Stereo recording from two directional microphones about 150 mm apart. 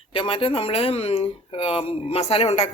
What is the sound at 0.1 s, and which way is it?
Speech, 35° left (ahead or behind).